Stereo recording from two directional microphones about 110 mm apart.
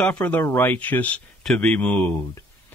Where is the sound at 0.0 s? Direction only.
15° left (ahead or behind).